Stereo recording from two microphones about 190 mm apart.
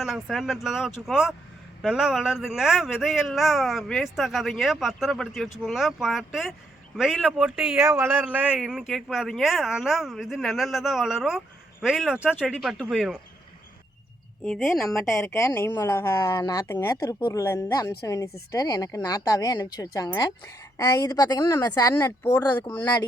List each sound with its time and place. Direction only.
0.0 s speech: centre (ahead or behind)
14.4 s speech: centre (ahead or behind)
14.9 s speech: 15° left (ahead or behind)